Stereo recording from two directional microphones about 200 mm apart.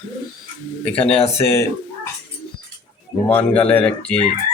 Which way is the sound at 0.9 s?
30° left (ahead or behind).